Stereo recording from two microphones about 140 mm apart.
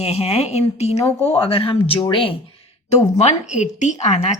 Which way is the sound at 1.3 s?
40° left (ahead or behind).